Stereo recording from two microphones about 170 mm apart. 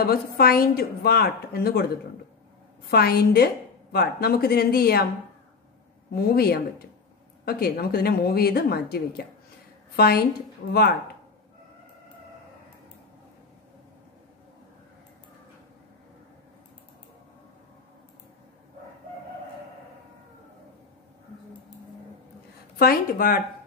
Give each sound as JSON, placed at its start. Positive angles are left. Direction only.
{"t": 0.0, "sound": "a woman's voice", "side_deg": 65}
{"t": 2.9, "sound": "a woman's voice", "side_deg": 65}
{"t": 6.1, "sound": "a woman's voice", "side_deg": 65}
{"t": 22.8, "sound": "a woman's voice", "side_deg": 60}